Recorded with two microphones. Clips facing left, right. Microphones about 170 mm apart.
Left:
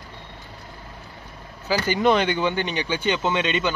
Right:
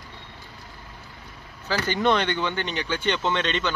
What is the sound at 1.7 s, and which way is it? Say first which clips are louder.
A man's voice: left 3 dB; 5° left (ahead or behind).